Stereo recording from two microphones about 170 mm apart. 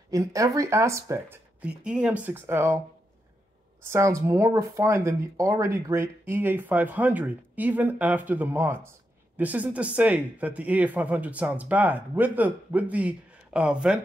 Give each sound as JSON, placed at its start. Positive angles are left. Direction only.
{"t": 0.1, "sound": "speech", "side_deg": -20}
{"t": 3.8, "sound": "speech", "side_deg": -15}